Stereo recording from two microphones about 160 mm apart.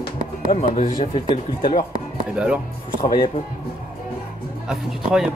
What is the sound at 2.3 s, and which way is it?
Speech, 5° right (ahead or behind).